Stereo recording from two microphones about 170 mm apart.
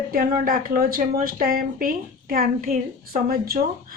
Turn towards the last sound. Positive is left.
turn(degrees=-60)  # may be behind; listen again after turning